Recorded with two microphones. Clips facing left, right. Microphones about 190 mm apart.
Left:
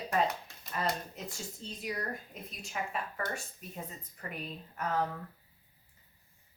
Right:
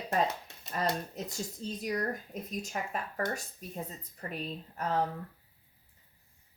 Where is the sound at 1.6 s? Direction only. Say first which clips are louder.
Right 5 dB; 40° right (ahead or behind).